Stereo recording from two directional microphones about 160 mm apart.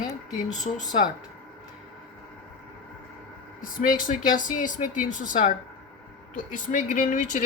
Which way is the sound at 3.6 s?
55° left (ahead or behind).